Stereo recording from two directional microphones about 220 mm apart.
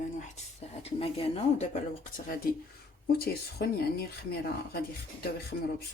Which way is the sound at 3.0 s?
45° left (ahead or behind).